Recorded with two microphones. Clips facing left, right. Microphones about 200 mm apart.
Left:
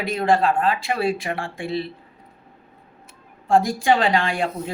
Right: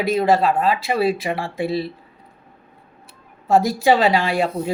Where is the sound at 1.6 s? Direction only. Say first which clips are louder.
Right 5 dB; 40° right (ahead or behind).